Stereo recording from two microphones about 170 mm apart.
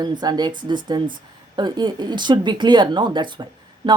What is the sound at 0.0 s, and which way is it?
Speech, 25° right (ahead or behind).